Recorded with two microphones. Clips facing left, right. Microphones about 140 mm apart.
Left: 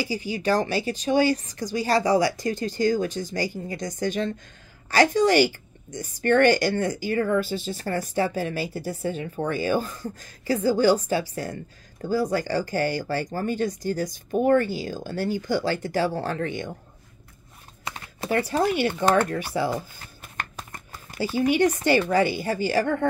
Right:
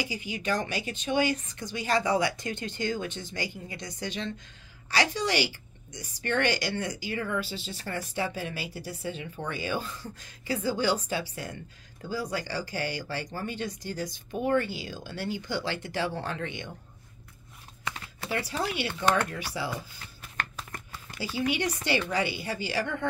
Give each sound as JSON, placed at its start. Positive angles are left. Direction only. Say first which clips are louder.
{"t": 0.0, "sound": "a woman's voice", "louder": "left 7 dB", "side_deg": 35}
{"t": 18.2, "sound": "a woman's voice", "louder": "left 8 dB", "side_deg": 45}